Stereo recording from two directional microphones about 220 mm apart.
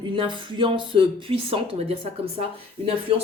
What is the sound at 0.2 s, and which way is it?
Speech, 25° right (ahead or behind).